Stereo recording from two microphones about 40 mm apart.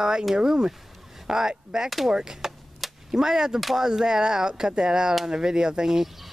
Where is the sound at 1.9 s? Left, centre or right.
Centre.